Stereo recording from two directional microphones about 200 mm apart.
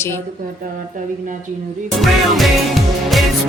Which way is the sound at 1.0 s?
45° right (ahead or behind).